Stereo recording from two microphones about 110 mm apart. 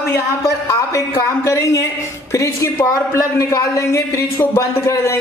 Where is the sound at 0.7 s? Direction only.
25° left (ahead or behind).